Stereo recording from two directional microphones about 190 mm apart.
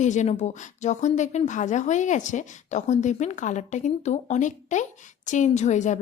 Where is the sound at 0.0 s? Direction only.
40° left (ahead or behind).